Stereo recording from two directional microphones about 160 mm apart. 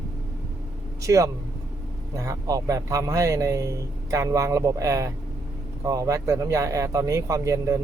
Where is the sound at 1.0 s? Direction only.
20° right (ahead or behind).